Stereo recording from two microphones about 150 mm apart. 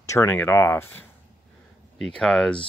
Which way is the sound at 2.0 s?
5° left (ahead or behind).